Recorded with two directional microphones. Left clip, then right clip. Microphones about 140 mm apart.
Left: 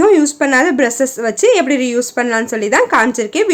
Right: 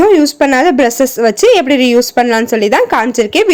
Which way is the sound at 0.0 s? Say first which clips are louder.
Right 3 dB; 35° right (ahead or behind).